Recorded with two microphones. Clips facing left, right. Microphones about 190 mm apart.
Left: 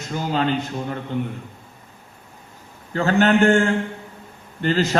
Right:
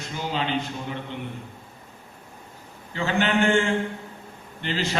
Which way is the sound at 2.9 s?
45° left (ahead or behind).